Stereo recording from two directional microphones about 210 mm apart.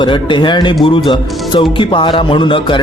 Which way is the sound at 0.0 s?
25° left (ahead or behind).